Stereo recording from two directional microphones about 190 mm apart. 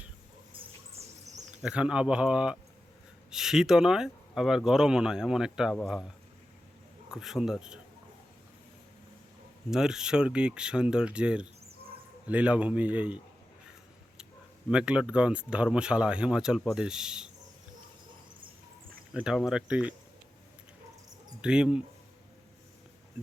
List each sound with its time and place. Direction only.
0.5 s a sound: 30° right (ahead or behind)
1.6 s speech: 5° right (ahead or behind)
7.1 s speech: 5° right (ahead or behind)
9.6 s a man's voice: 5° right (ahead or behind)
14.7 s speech: 5° right (ahead or behind)
19.1 s speech: 5° right (ahead or behind)
21.4 s speech: 5° right (ahead or behind)